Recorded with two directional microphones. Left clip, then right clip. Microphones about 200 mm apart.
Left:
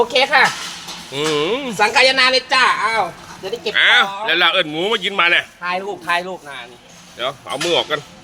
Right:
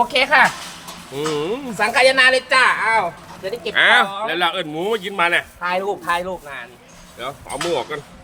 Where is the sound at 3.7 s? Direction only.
30° right (ahead or behind).